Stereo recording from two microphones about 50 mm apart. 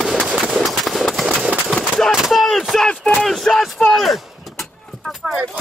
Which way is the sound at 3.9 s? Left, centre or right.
Centre.